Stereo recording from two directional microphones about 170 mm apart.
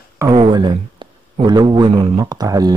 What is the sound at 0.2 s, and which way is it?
A man's voice, 25° right (ahead or behind).